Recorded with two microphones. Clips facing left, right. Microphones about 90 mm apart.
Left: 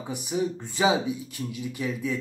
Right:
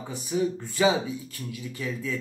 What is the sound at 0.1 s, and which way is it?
Speech, 20° left (ahead or behind).